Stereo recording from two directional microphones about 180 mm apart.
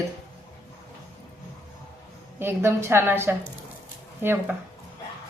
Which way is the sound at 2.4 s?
15° right (ahead or behind).